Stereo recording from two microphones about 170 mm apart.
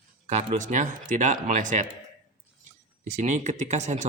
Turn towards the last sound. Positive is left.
turn(degrees=-40)  # may be behind; listen again after turning